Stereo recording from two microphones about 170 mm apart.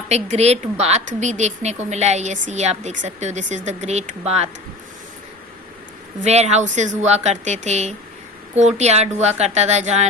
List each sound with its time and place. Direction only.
0.1 s a woman's voice: 40° right (ahead or behind)
6.2 s a woman's voice: 40° right (ahead or behind)